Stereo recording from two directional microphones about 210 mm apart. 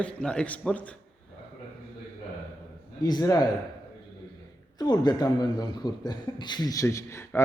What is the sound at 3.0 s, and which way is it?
Speech, 20° left (ahead or behind).